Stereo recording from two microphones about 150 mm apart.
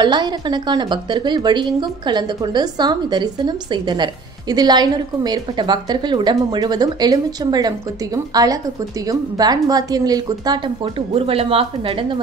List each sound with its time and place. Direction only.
0.0 s a woman's voice: 30° right (ahead or behind)
9.1 s a woman's voice: 25° right (ahead or behind)
11.1 s speech: 40° right (ahead or behind)